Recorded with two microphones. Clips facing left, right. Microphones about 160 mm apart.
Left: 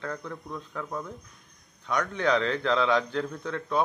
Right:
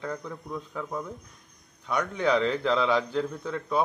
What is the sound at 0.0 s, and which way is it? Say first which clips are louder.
A man's voice: right 1 dB; 10° right (ahead or behind).